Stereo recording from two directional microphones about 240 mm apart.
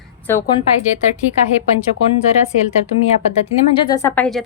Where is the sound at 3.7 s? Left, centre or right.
Centre.